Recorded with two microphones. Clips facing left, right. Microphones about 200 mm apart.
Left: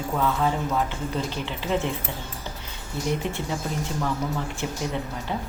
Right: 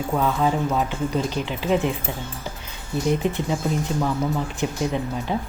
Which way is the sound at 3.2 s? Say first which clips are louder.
Right 6 dB; 15° right (ahead or behind).